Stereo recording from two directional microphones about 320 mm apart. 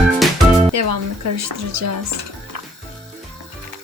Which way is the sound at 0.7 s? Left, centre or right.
Right.